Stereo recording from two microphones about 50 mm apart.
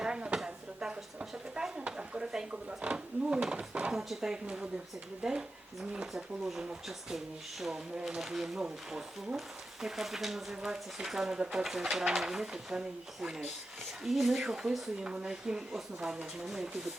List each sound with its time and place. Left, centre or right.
0.0 s a sound: centre
3.9 s speech: centre
4.4 s speech: centre
9.8 s speech: centre
14.0 s speech: centre
15.0 s speech: centre